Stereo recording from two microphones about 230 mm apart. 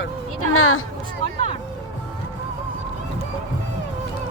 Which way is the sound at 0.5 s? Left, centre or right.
Left.